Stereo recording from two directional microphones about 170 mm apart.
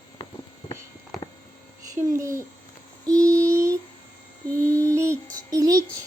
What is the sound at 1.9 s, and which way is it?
Speech, 20° right (ahead or behind).